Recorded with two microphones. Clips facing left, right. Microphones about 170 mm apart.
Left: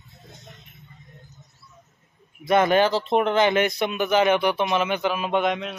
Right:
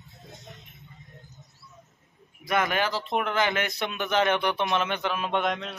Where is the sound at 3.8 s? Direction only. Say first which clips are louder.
Left 5 dB; 10° left (ahead or behind).